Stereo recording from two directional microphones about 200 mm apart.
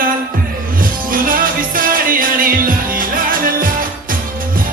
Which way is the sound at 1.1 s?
45° right (ahead or behind).